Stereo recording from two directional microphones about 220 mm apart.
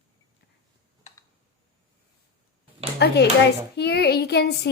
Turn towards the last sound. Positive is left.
turn(degrees=50)  # may be behind; listen again after turning